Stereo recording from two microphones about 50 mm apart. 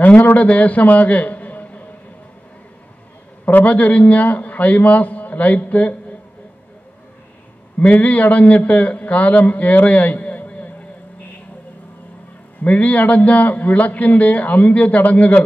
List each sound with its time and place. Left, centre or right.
0.0 s a man's voice: left
3.4 s a man's voice: left
7.8 s a man's voice: left
12.6 s a man's voice: left